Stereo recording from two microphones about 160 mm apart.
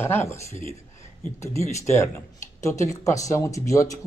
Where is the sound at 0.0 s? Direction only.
15° left (ahead or behind).